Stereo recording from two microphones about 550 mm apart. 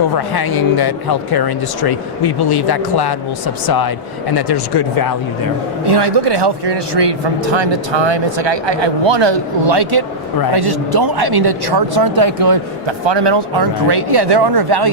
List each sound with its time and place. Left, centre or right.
0.3 s speech: left
5.8 s speech: right